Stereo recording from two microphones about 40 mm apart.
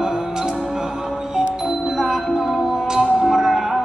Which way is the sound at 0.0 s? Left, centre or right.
Centre.